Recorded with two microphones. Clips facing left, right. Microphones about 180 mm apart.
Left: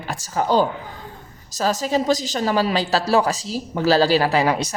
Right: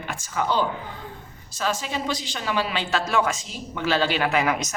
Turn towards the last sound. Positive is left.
turn(degrees=30)  # may be behind; listen again after turning